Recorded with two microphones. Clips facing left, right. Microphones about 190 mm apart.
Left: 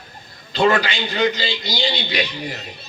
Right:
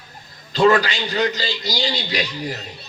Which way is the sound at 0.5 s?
40° right (ahead or behind).